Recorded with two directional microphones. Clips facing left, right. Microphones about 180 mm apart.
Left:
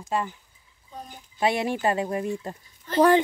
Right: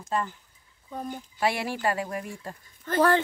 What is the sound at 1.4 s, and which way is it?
Speech, 20° left (ahead or behind).